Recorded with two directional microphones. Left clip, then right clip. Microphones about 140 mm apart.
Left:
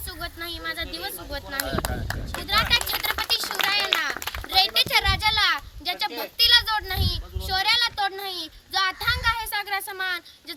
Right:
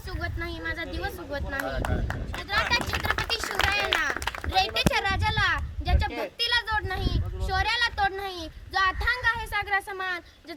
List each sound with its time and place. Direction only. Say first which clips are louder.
0.2 s speech: even; 25° left (ahead or behind)
2.5 s a sound: left 4 dB; 15° left (ahead or behind)
4.5 s a child's voice: left 5 dB; 10° left (ahead or behind)